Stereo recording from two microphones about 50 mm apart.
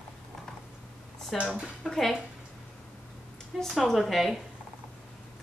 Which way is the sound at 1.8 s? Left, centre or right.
Centre.